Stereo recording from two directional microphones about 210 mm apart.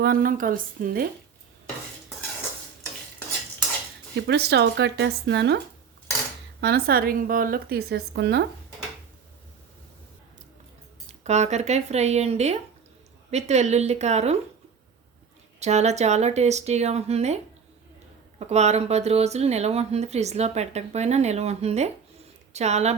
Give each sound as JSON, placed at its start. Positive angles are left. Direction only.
{"t": 0.0, "sound": "speech", "side_deg": -45}
{"t": 4.3, "sound": "a woman's voice", "side_deg": -50}
{"t": 6.6, "sound": "a woman's voice", "side_deg": -50}
{"t": 11.0, "sound": "speech", "side_deg": -30}
{"t": 15.6, "sound": "speech", "side_deg": -30}